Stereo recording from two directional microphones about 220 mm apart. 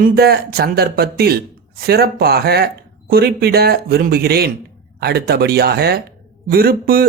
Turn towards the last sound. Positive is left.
turn(degrees=-40)  # may be behind; listen again after turning